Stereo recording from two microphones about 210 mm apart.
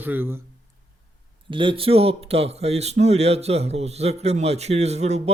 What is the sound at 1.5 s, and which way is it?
A man's voice, 25° right (ahead or behind).